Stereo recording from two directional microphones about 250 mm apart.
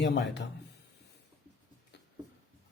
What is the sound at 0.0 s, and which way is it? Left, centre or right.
Speech, left.